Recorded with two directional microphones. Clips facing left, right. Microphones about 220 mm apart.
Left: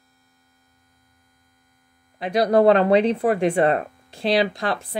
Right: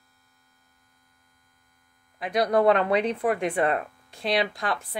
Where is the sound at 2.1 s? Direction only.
30° left (ahead or behind).